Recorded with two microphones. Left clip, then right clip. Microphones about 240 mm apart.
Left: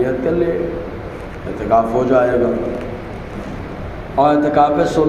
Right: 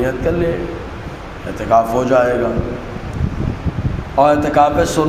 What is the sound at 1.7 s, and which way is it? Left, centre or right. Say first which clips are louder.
Speech: right 1 dB; right.